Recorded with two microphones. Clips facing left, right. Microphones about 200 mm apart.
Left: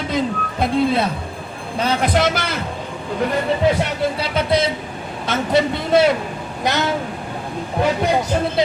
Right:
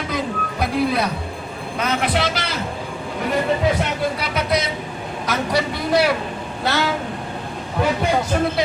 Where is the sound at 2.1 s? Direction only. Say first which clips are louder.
Left 4 dB; 50° left (ahead or behind).